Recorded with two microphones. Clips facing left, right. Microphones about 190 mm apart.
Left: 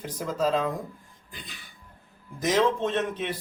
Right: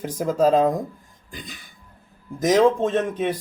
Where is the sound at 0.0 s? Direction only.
45° right (ahead or behind).